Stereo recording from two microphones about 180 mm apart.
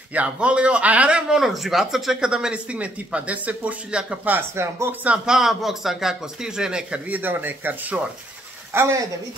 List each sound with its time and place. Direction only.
0.1 s a man's voice: 5° right (ahead or behind)